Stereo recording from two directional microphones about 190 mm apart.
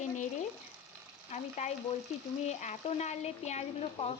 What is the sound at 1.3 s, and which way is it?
A woman's voice, 40° left (ahead or behind).